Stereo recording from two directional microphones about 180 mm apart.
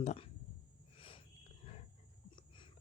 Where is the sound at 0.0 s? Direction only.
35° left (ahead or behind).